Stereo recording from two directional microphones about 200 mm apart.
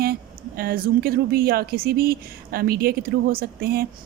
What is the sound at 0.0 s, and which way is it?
A woman's voice, 50° right (ahead or behind).